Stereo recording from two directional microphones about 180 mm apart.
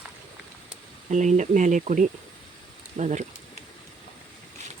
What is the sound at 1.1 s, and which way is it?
Speech, 40° right (ahead or behind).